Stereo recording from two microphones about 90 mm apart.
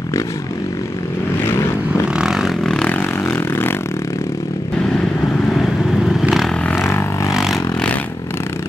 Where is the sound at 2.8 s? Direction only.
20° left (ahead or behind).